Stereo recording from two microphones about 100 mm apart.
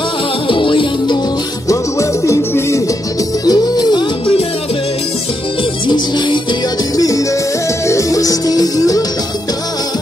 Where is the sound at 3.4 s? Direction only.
40° left (ahead or behind).